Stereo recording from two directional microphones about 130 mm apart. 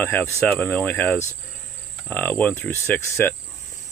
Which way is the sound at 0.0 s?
15° left (ahead or behind).